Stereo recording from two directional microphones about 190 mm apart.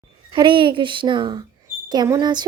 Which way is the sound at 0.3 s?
25° right (ahead or behind).